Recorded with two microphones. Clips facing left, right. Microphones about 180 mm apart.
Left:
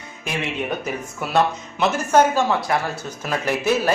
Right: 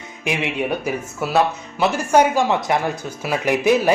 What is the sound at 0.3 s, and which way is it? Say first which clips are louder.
A man's voice: right 3 dB; 10° right (ahead or behind).